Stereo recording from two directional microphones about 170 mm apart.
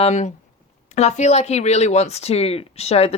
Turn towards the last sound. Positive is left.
turn(degrees=35)  # may be behind; listen again after turning